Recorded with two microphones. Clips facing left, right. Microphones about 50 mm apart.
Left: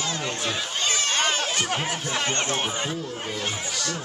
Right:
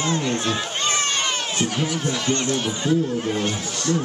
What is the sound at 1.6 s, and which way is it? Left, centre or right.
Speech, left.